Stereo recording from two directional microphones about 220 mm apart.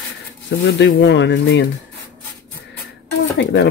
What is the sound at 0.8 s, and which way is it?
Speech, 55° left (ahead or behind).